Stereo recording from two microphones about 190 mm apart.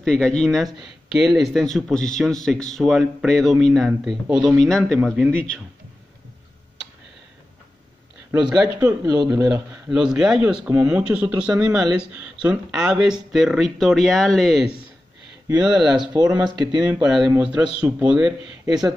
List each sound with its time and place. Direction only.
0.0 s speech: 5° left (ahead or behind)
8.3 s speech: 5° right (ahead or behind)
8.5 s speech: 20° right (ahead or behind)
9.8 s speech: 5° right (ahead or behind)
18.7 s speech: 20° right (ahead or behind)